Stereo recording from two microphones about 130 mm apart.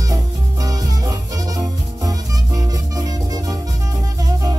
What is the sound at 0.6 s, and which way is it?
Music, 30° right (ahead or behind).